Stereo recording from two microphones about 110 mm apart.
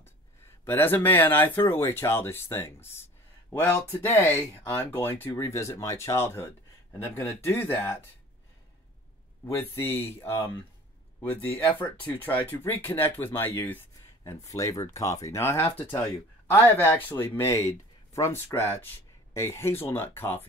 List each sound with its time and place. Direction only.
0.7 s speech: 20° left (ahead or behind)
9.5 s speech: 20° left (ahead or behind)